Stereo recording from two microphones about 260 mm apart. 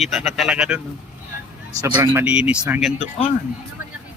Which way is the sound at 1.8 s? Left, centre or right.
Centre.